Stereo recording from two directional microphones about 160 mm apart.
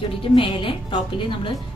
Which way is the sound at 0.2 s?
30° left (ahead or behind).